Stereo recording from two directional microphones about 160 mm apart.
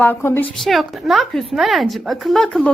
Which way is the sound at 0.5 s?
Centre (ahead or behind).